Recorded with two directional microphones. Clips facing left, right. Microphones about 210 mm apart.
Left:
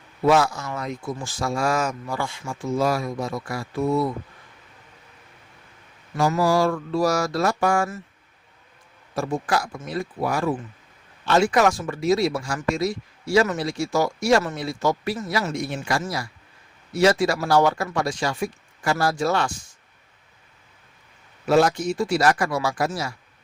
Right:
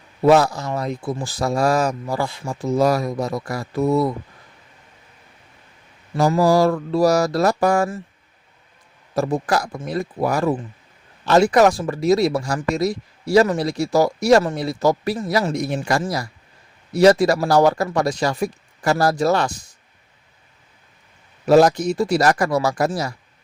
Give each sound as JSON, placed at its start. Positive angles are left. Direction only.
{"t": 0.3, "sound": "speech", "side_deg": -35}
{"t": 6.1, "sound": "speech", "side_deg": -40}
{"t": 9.1, "sound": "speech", "side_deg": -40}
{"t": 21.4, "sound": "speech", "side_deg": -40}